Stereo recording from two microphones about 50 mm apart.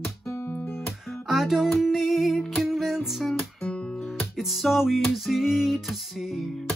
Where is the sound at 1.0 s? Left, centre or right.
Centre.